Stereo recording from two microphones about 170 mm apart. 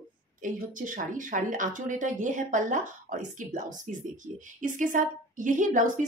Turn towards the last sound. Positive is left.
turn(degrees=-50)  # may be behind; listen again after turning